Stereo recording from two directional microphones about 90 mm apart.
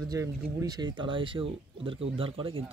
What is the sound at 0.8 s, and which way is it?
Speech, 60° right (ahead or behind).